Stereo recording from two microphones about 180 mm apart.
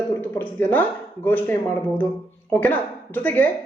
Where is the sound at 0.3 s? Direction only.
10° left (ahead or behind).